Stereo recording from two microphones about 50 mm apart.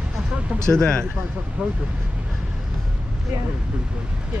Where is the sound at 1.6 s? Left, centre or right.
Right.